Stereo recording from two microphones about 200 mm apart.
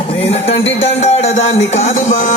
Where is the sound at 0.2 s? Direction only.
30° left (ahead or behind).